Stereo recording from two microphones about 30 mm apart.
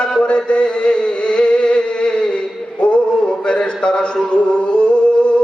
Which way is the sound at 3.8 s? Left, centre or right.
Left.